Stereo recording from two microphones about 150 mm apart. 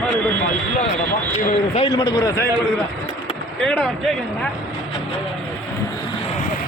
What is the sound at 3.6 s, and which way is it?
Speech, 5° left (ahead or behind).